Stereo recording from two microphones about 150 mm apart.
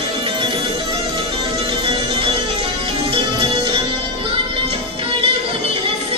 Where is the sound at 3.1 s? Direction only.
35° right (ahead or behind).